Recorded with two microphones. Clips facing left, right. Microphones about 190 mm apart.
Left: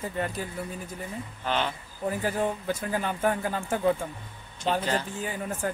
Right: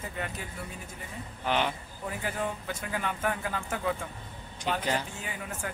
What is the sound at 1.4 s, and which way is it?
Speech, 15° right (ahead or behind).